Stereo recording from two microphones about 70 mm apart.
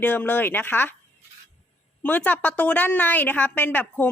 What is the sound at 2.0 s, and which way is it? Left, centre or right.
A woman's voice, left.